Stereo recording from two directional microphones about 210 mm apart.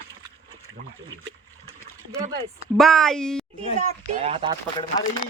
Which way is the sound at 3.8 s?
25° right (ahead or behind).